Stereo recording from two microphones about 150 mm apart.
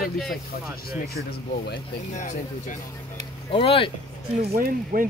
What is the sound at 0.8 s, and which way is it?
Speech, 90° left.